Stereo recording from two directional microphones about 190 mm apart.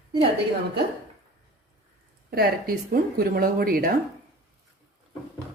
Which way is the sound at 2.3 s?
50° right (ahead or behind).